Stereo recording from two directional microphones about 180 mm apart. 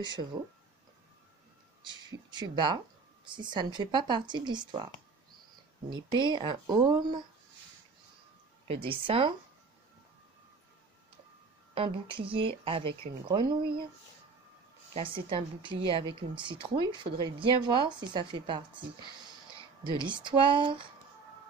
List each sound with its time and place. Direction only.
1.8 s speech: 25° right (ahead or behind)
5.9 s speech: 25° right (ahead or behind)
8.6 s speech: 30° right (ahead or behind)
11.7 s speech: 30° right (ahead or behind)
15.0 s speech: 30° right (ahead or behind)
20.0 s speech: 25° right (ahead or behind)